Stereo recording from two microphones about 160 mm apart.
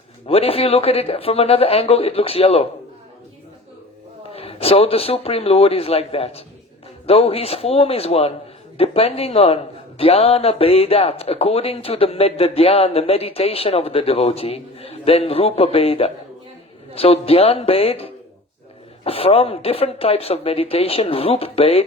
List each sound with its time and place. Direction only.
0.3 s speech: 40° left (ahead or behind)
4.3 s speech: 40° left (ahead or behind)